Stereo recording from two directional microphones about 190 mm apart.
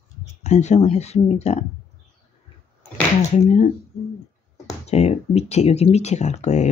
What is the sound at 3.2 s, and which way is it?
Speech, 35° left (ahead or behind).